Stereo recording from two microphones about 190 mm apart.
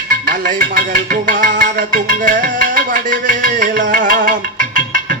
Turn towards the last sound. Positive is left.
turn(degrees=-45)  # may be behind; listen again after turning